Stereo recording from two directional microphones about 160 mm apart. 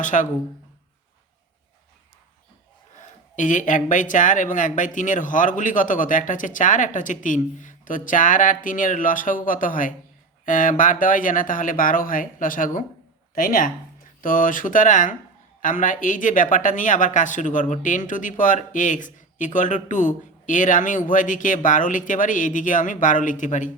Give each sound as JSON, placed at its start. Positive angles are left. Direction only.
{"t": 0.0, "sound": "speech", "side_deg": 50}
{"t": 2.9, "sound": "speech", "side_deg": 50}